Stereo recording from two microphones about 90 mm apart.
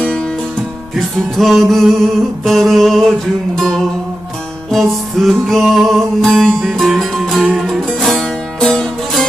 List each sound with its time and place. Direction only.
0.0 s music: 10° left (ahead or behind)